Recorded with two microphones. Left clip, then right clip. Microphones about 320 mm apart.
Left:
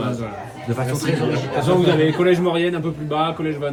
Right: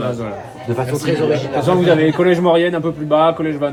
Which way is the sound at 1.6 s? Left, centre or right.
Right.